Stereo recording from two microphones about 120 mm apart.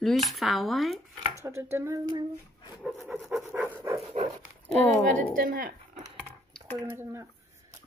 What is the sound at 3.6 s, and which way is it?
Speech, 20° right (ahead or behind).